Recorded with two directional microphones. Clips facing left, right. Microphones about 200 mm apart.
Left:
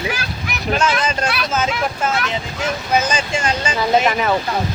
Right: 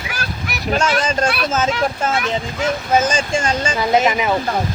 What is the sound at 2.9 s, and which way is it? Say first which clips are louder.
Speech: right 2 dB; 45° right (ahead or behind).